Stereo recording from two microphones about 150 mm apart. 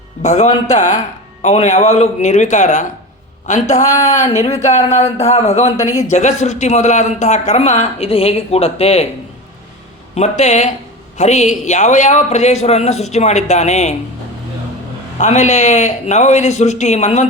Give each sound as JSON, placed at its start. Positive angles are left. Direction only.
{"t": 0.2, "sound": "speech", "side_deg": 50}
{"t": 3.8, "sound": "speech", "side_deg": 20}
{"t": 4.1, "sound": "speech", "side_deg": 55}
{"t": 5.7, "sound": "speech", "side_deg": 20}
{"t": 6.0, "sound": "speech", "side_deg": 50}
{"t": 10.2, "sound": "speech", "side_deg": 50}
{"t": 15.2, "sound": "speech", "side_deg": 50}